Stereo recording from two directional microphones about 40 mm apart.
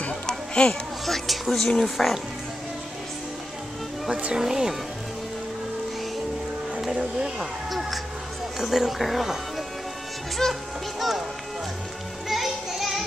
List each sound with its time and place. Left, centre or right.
0.3 s music: left
1.0 s speech: centre
4.4 s speech: centre
7.3 s speech: centre
10.4 s speech: centre
11.0 s speech: centre
12.3 s music: centre